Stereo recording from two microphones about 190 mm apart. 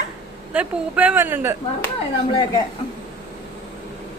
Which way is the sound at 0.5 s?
10° right (ahead or behind).